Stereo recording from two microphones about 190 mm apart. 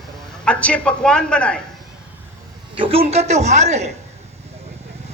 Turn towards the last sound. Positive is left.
turn(degrees=-35)  # may be behind; listen again after turning